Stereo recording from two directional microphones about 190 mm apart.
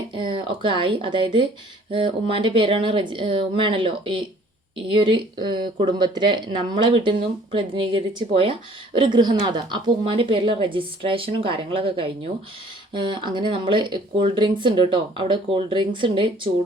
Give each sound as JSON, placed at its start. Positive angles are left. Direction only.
{"t": 0.1, "sound": "speech", "side_deg": -25}